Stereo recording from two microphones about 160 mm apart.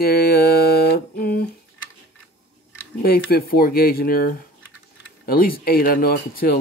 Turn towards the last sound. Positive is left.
turn(degrees=70)  # may be behind; listen again after turning